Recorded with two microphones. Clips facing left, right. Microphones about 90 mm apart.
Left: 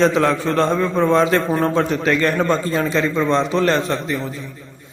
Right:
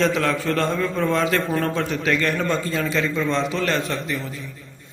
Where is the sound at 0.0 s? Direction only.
30° left (ahead or behind).